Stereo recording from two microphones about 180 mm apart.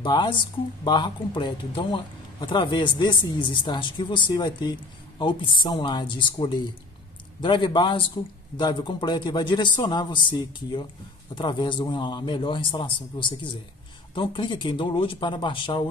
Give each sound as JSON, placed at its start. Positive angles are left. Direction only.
{"t": 0.0, "sound": "speech", "side_deg": 25}